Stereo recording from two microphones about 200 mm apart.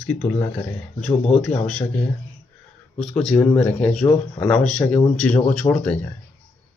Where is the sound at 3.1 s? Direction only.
5° left (ahead or behind).